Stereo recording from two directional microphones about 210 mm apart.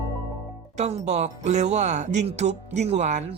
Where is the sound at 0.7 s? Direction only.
35° right (ahead or behind).